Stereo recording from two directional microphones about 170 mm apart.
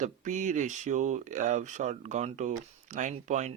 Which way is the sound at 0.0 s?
45° right (ahead or behind).